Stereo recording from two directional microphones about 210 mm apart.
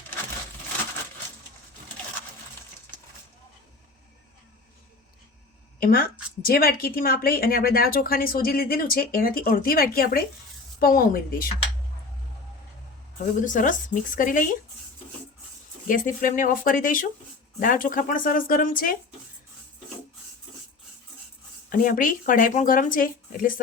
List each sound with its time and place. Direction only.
5.8 s a woman's voice: 45° left (ahead or behind)
13.4 s speech: 40° left (ahead or behind)
15.9 s speech: 40° left (ahead or behind)
21.7 s speech: 40° left (ahead or behind)